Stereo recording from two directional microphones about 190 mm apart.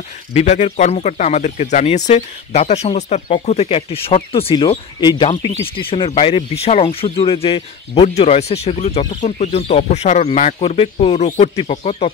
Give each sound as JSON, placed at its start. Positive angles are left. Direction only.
{"t": 0.3, "sound": "speech", "side_deg": 35}